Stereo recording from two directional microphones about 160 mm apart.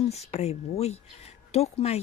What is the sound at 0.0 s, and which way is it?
Speech, 40° left (ahead or behind).